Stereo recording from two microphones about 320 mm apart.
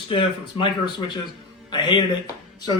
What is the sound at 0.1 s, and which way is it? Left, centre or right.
A man's voice, centre.